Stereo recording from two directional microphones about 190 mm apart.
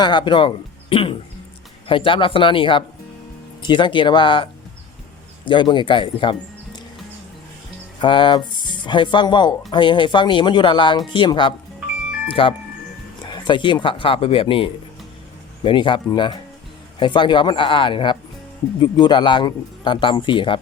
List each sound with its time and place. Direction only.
0.0 s a man's voice: 25° left (ahead or behind)
5.5 s a man's voice: 25° left (ahead or behind)
8.0 s a man's voice: 25° left (ahead or behind)